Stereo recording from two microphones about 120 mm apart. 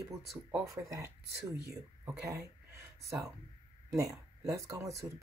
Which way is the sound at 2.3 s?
25° right (ahead or behind).